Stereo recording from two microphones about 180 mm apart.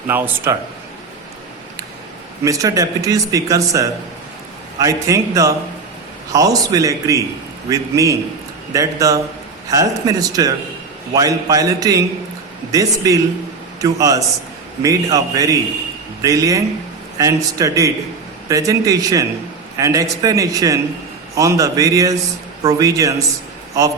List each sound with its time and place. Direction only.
0.1 s a man's voice: 10° right (ahead or behind)
2.4 s a man's voice: 20° right (ahead or behind)